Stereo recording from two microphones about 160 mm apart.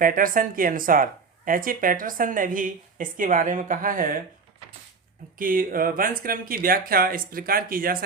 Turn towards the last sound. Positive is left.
turn(degrees=-65)  # may be behind; listen again after turning